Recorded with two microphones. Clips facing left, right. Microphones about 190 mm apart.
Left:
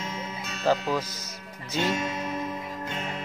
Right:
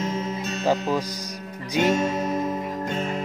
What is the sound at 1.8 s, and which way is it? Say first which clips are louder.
Music: right 7 dB; 45° right (ahead or behind).